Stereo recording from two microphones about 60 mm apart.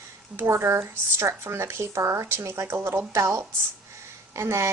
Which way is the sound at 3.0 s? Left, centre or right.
Right.